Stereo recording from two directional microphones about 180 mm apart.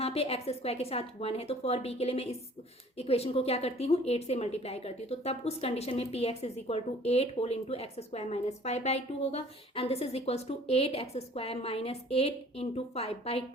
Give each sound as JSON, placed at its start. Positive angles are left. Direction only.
{"t": 0.0, "sound": "a woman's voice", "side_deg": 35}